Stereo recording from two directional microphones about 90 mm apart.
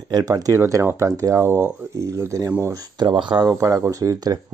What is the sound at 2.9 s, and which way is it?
Speech, 60° right (ahead or behind).